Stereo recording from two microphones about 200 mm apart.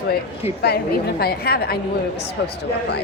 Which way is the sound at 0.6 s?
50° left (ahead or behind).